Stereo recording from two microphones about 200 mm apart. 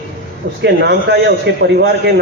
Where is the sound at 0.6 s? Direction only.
60° right (ahead or behind).